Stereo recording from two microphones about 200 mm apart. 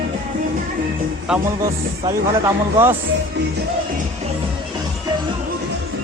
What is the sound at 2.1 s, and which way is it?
Speech, 15° right (ahead or behind).